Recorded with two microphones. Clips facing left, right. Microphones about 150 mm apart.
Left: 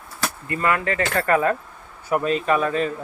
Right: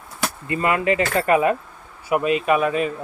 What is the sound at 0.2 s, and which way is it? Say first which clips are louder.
Speech: right 2 dB; 20° right (ahead or behind).